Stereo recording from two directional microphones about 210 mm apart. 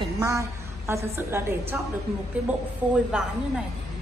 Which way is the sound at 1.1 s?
10° right (ahead or behind).